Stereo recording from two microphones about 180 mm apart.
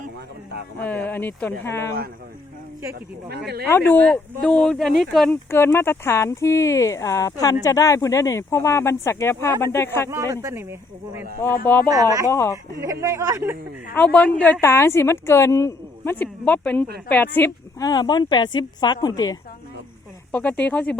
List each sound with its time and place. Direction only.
0.8 s a woman's voice: 10° left (ahead or behind)
3.2 s speech: 65° right (ahead or behind)
3.7 s speech: 10° left (ahead or behind)
5.5 s a woman's voice: 15° left (ahead or behind)
10.1 s speech: 15° right (ahead or behind)
11.6 s a woman's voice: 10° left (ahead or behind)
11.9 s speech: 20° right (ahead or behind)
12.3 s a woman's voice: 15° left (ahead or behind)
12.7 s speech: 15° right (ahead or behind)
13.9 s a woman's voice: 10° left (ahead or behind)
20.3 s a woman's voice: 10° left (ahead or behind)